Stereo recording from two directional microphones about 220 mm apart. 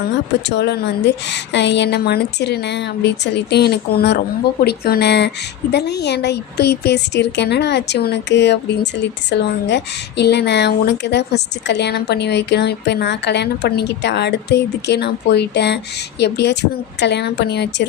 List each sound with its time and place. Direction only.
0.4 s a woman's voice: 50° left (ahead or behind)